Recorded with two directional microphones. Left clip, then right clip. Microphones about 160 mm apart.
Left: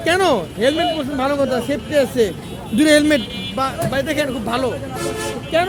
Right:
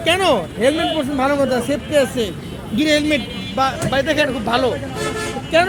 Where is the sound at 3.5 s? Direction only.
15° left (ahead or behind).